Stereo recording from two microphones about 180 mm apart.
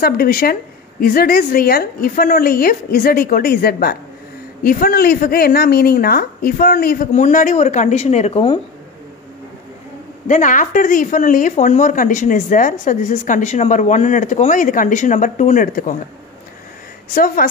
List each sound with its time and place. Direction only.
0.0 s a woman's voice: 55° left (ahead or behind); by 8.5 s 35° left (ahead or behind)
10.2 s speech: 45° left (ahead or behind)
17.1 s speech: 50° left (ahead or behind)